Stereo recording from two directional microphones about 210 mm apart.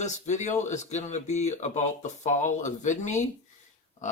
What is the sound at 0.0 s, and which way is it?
Speech, 35° left (ahead or behind).